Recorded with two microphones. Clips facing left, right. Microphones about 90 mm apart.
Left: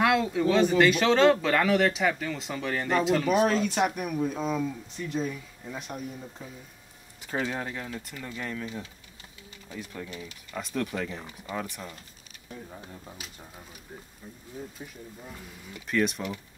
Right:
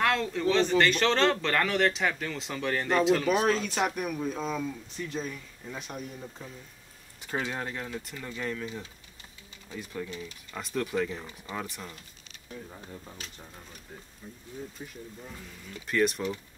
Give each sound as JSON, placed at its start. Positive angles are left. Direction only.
{"t": 0.0, "sound": "speech", "side_deg": 10}
{"t": 7.2, "sound": "speech", "side_deg": 0}
{"t": 9.7, "sound": "speech", "side_deg": 5}
{"t": 14.8, "sound": "speech", "side_deg": 5}